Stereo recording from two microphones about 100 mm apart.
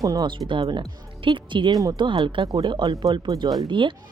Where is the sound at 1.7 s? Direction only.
40° right (ahead or behind).